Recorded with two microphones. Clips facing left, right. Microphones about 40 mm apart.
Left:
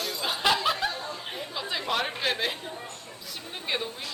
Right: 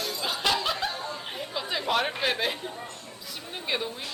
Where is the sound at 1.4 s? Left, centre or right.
Centre.